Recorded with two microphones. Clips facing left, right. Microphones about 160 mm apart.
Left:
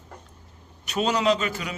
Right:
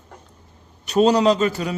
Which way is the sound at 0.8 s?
35° right (ahead or behind).